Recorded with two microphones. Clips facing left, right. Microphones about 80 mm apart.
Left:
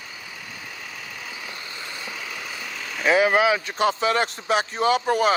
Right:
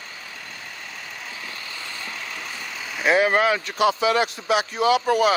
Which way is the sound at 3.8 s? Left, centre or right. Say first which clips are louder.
Right 4 dB; left.